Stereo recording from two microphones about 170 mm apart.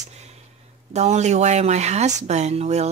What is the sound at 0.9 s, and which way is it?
A woman's voice, 40° right (ahead or behind).